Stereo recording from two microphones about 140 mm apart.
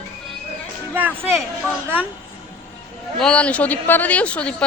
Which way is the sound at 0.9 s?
15° right (ahead or behind).